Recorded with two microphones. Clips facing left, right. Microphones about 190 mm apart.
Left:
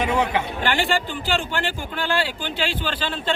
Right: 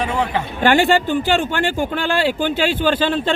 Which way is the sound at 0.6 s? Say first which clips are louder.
Right 11 dB; 50° right (ahead or behind).